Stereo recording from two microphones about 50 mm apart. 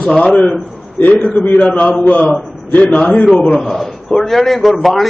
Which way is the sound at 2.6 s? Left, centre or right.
Left.